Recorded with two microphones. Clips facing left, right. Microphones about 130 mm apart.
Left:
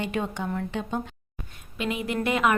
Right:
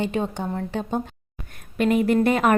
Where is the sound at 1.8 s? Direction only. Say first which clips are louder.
Right 9 dB; 50° right (ahead or behind).